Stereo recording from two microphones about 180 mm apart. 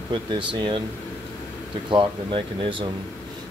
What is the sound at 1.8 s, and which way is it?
Speech, 30° right (ahead or behind).